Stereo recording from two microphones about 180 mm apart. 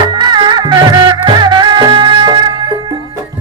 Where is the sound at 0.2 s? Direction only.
25° right (ahead or behind).